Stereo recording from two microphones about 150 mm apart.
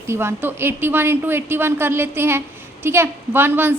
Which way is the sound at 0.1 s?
15° right (ahead or behind).